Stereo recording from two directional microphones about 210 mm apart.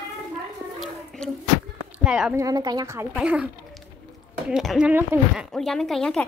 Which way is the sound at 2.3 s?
15° right (ahead or behind).